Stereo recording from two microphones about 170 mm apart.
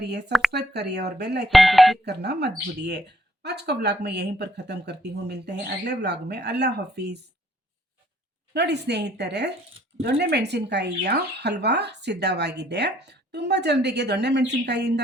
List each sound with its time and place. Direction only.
0.0 s speech: 75° right (ahead or behind)
1.5 s doorbell: centre (ahead or behind)
2.0 s speech: 75° right (ahead or behind)
8.5 s speech: 85° right
10.0 s speech: 70° right (ahead or behind)